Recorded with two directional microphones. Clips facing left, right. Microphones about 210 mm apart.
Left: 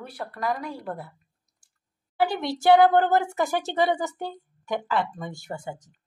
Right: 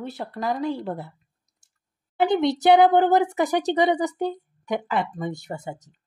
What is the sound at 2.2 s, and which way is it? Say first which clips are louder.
A woman's voice: right 5 dB; 20° right (ahead or behind).